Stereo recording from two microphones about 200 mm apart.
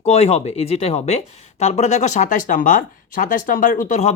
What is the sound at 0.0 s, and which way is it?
Speech, 30° left (ahead or behind).